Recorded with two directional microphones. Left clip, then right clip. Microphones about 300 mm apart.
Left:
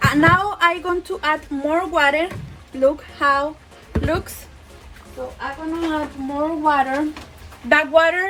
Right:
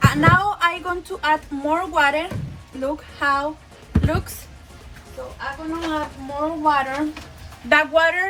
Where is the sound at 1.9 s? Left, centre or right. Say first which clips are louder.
Left 2 dB; left.